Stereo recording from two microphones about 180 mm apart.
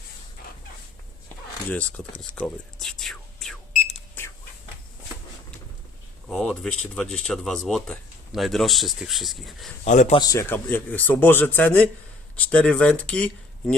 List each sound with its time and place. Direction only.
1.7 s speech: 5° left (ahead or behind)
2.4 s a sound: centre (ahead or behind)
6.2 s speech: 5° left (ahead or behind)
9.8 s speech: 40° left (ahead or behind)
10.2 s speech: 20° left (ahead or behind)